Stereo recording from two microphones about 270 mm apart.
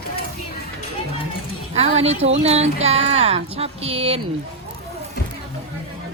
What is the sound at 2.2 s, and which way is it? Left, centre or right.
Speech, right.